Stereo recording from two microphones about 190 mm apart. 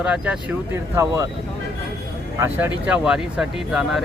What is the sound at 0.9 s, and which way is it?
Speech, 15° right (ahead or behind).